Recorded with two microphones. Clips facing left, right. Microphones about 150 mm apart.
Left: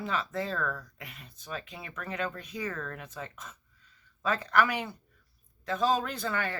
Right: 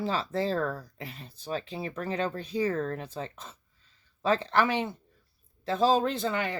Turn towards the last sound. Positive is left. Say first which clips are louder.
# right 4 dB
turn(degrees=-20)  # may be behind; listen again after turning